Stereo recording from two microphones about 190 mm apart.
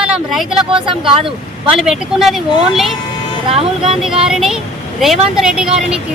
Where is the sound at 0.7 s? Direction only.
25° right (ahead or behind).